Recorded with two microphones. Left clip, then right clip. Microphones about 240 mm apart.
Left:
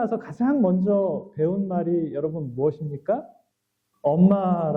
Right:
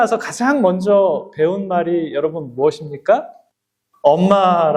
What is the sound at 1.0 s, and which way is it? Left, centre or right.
Speech, right.